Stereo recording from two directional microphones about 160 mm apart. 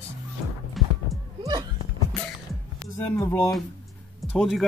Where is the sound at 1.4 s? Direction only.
25° right (ahead or behind).